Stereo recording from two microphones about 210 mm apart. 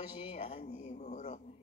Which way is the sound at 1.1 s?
35° left (ahead or behind).